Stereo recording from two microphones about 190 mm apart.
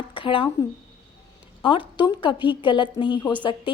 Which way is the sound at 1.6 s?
25° left (ahead or behind).